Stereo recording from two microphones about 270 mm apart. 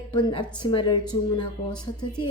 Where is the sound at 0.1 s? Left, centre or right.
Centre.